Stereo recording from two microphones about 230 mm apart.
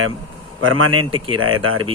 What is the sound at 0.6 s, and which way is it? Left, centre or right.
Speech, right.